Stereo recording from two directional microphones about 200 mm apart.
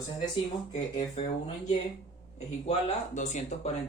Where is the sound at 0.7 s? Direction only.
35° left (ahead or behind).